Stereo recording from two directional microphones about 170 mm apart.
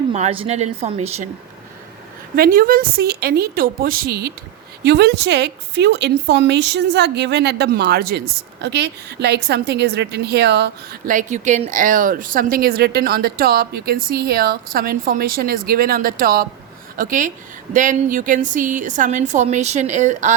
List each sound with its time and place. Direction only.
0.1 s a woman's voice: 40° right (ahead or behind)
2.3 s a woman's voice: 60° right (ahead or behind)
8.6 s a woman's voice: 90° right
11.0 s a woman's voice: 50° right (ahead or behind)